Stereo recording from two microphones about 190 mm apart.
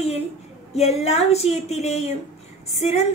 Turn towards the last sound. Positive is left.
turn(degrees=35)  # may be behind; listen again after turning